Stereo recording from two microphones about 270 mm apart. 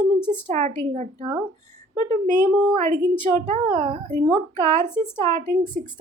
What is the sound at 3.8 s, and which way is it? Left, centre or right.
Speech, right.